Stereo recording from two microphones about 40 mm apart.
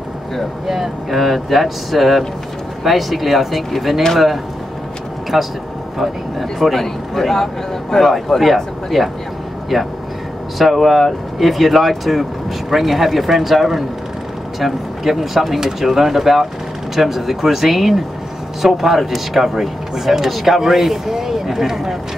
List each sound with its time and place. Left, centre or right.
0.7 s speech: centre
5.3 s speech: centre
6.6 s a man's voice: centre
8.9 s speech: centre
10.6 s speech: centre